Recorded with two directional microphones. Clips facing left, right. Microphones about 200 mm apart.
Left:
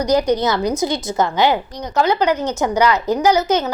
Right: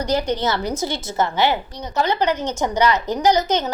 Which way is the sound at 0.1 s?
15° left (ahead or behind).